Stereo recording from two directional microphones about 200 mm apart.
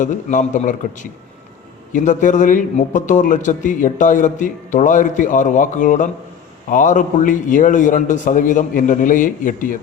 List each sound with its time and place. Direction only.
0.0 s a man's voice: 40° left (ahead or behind)